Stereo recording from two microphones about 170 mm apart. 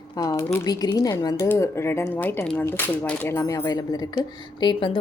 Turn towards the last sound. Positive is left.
turn(degrees=25)  # may be behind; listen again after turning